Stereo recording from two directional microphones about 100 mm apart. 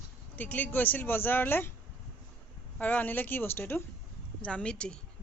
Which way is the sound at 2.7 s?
15° left (ahead or behind).